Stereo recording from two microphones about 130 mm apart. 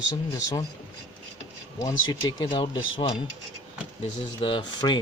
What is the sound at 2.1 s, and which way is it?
Speech, 40° left (ahead or behind).